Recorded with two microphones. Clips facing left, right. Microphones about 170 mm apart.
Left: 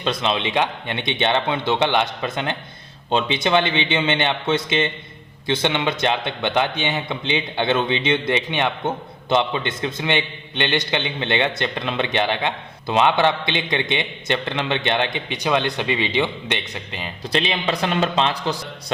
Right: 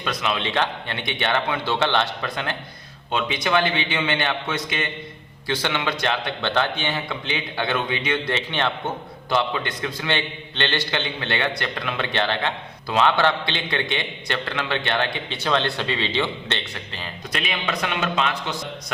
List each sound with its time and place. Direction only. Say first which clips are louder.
0.0 s a man's voice: left 3 dB; 25° left (ahead or behind)
17.3 s a man's voice: left 5 dB; 30° left (ahead or behind)